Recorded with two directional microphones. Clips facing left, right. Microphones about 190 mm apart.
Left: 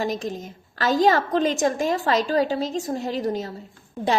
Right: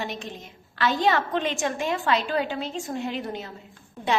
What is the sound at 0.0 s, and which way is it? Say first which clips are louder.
A woman's voice: left 7 dB; 40° left (ahead or behind).